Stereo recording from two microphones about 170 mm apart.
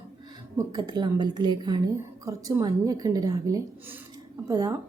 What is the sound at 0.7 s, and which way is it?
A woman's voice, 25° right (ahead or behind).